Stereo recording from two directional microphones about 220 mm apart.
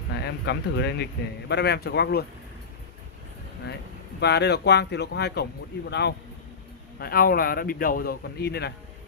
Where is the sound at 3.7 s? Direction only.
50° left (ahead or behind).